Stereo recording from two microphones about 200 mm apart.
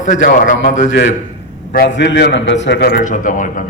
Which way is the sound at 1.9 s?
60° left (ahead or behind).